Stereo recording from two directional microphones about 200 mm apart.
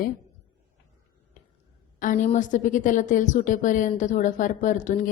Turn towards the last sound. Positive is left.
turn(degrees=40)  # may be behind; listen again after turning